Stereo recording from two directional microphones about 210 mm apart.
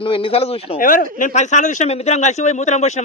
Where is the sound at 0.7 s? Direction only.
40° left (ahead or behind).